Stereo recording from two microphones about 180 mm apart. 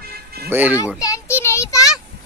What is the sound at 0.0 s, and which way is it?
Music, 60° right (ahead or behind).